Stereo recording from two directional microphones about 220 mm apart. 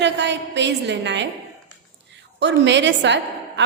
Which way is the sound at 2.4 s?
50° right (ahead or behind).